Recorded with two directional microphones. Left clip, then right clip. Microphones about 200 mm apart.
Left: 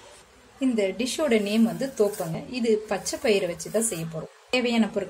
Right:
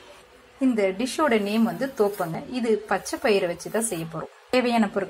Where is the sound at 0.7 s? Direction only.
Centre (ahead or behind).